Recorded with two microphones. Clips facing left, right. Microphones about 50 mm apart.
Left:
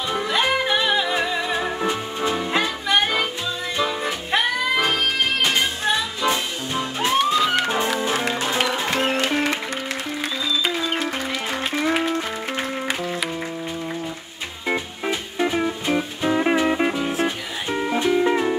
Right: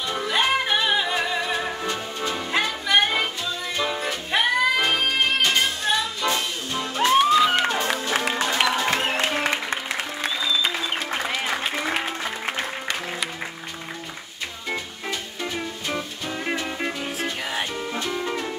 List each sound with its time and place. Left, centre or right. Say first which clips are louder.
0.3 s music: left 1 dB; centre; by 2.3 s left
2.3 s music: right 1 dB; centre
7.2 s music: right 1 dB; centre
11.8 s music: left 5 dB; centre
14.7 s music: left 6 dB; left